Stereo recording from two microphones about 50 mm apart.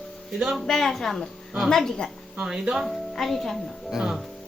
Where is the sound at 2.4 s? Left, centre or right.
Centre.